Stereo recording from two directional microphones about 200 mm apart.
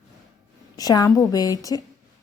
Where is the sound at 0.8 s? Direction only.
20° left (ahead or behind).